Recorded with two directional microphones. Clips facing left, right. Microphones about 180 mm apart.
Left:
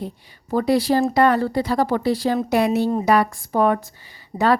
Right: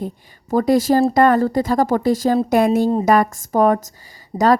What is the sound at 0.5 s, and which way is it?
Speech, 45° right (ahead or behind).